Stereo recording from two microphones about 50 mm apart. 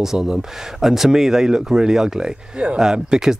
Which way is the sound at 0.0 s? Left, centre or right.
Centre.